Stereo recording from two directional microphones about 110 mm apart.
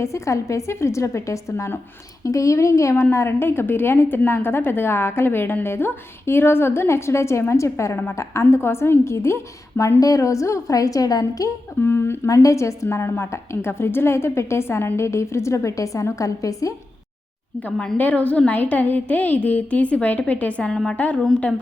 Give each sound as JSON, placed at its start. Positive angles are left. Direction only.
{"t": 0.0, "sound": "a woman's voice", "side_deg": 25}
{"t": 11.8, "sound": "a woman's voice", "side_deg": 20}
{"t": 17.6, "sound": "a woman's voice", "side_deg": 10}